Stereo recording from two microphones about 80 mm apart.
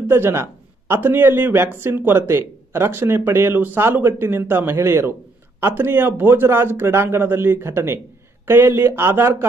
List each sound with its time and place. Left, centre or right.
0.1 s speech: right